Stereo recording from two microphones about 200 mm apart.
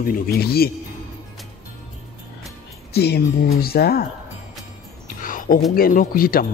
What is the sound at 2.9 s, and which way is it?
Speech, 55° left (ahead or behind).